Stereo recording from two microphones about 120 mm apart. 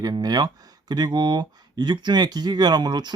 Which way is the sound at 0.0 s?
35° right (ahead or behind).